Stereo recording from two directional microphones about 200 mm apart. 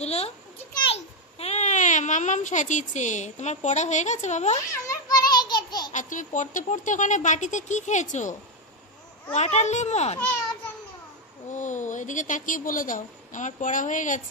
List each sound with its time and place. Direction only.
0.0 s a woman's voice: 30° left (ahead or behind)
4.8 s child singing: 20° left (ahead or behind)
5.7 s a sound: 20° left (ahead or behind)
5.9 s a woman's voice: 40° left (ahead or behind)
11.5 s a woman's voice: 40° left (ahead or behind)